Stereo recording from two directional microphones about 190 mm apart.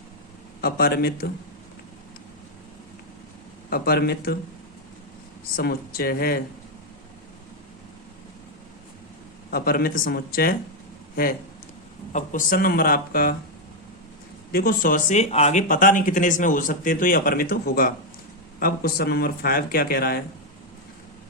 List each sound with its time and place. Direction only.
0.6 s speech: 50° left (ahead or behind)
3.7 s speech: 55° left (ahead or behind)
5.5 s speech: 50° left (ahead or behind)
9.5 s speech: 50° left (ahead or behind)
12.1 s speech: 45° left (ahead or behind)
14.5 s speech: 50° left (ahead or behind)